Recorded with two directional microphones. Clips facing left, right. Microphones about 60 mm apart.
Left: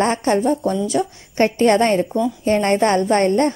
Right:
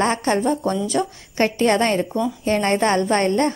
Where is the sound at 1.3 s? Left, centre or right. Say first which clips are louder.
Left 3 dB; left.